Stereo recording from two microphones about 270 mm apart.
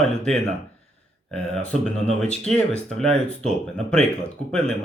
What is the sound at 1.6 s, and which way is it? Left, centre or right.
Speech, centre.